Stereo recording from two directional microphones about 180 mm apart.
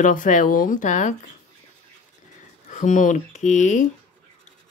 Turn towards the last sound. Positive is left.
turn(degrees=40)  # may be behind; listen again after turning